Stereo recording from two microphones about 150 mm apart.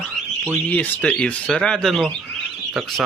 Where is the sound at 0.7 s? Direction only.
10° left (ahead or behind).